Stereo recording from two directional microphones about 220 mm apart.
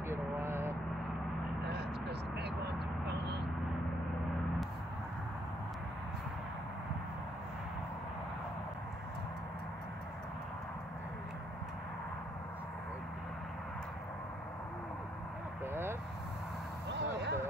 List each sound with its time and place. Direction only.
0.1 s vehicle: 10° right (ahead or behind)
1.6 s vehicle: 50° right (ahead or behind)
15.6 s vehicle: 10° right (ahead or behind)
16.9 s a sound: 50° right (ahead or behind)